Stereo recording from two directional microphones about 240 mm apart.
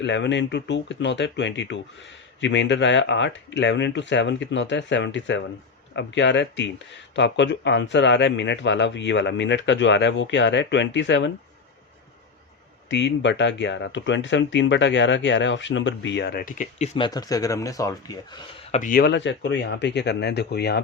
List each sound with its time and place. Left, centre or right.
0.0 s speech: left
12.9 s speech: left
17.1 s speech: centre
18.7 s speech: left